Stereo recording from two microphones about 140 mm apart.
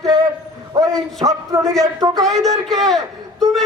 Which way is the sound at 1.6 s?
5° left (ahead or behind).